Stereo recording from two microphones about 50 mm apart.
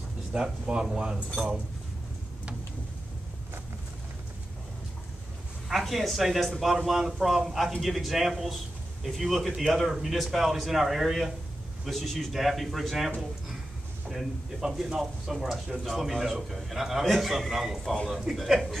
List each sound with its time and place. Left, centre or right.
0.3 s speech: centre
5.7 s a man's voice: centre
9.8 s a man's voice: centre